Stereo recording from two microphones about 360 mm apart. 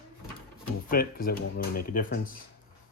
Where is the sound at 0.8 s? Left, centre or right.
Left.